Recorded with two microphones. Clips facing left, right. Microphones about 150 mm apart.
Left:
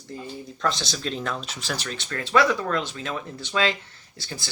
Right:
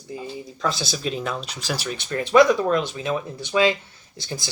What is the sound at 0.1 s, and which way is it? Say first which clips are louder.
Speech: right 3 dB; 5° right (ahead or behind).